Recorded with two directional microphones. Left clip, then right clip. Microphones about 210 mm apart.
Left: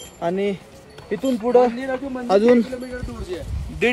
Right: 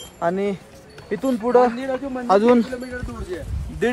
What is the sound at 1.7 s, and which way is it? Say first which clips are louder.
Speech: even; centre (ahead or behind).